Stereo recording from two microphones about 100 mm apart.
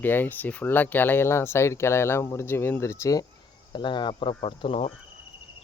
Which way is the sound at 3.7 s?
50° left (ahead or behind).